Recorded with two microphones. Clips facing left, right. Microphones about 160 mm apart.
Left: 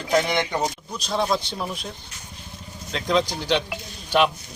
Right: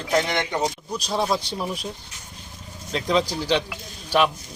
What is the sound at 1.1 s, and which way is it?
Speech, 5° right (ahead or behind).